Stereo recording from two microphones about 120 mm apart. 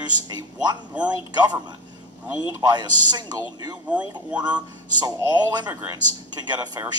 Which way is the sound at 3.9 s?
10° right (ahead or behind).